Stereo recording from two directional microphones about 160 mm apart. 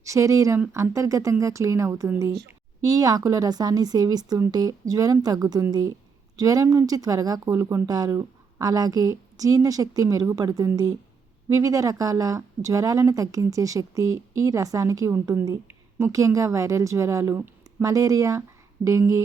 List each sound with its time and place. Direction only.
0.0 s speech: 20° right (ahead or behind)